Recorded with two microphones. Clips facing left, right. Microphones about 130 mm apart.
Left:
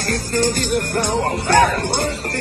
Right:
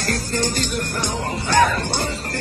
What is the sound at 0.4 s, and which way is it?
Music, 55° left (ahead or behind).